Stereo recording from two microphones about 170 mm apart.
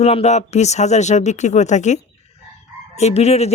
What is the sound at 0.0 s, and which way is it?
A man's voice, 40° left (ahead or behind).